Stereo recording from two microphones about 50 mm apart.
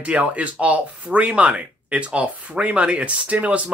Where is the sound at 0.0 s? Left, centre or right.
Right.